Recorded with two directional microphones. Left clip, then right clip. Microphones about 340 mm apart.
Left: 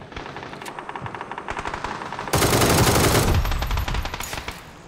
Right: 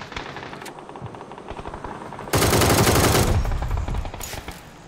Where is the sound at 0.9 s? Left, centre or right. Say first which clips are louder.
Left 5 dB; left.